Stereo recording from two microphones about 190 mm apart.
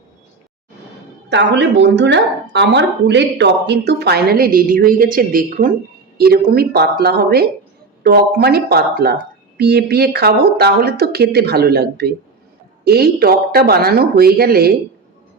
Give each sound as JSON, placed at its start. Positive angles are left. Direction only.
{"t": 1.3, "sound": "speech", "side_deg": -65}